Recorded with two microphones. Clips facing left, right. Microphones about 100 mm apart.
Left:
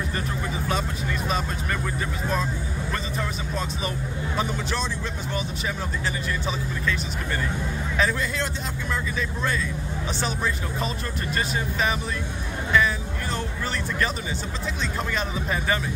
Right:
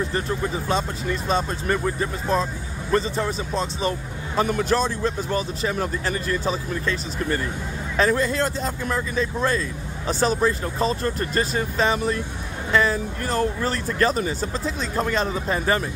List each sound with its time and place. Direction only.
1.3 s speech: 30° right (ahead or behind)
4.4 s speech: 50° right (ahead or behind)